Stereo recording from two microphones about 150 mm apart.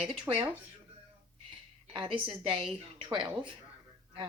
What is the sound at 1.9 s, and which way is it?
Speech, 35° right (ahead or behind).